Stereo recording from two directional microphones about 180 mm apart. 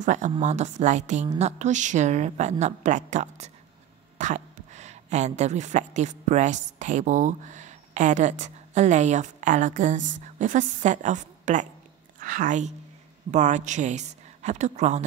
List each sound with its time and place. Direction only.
0.0 s a woman's voice: 45° right (ahead or behind)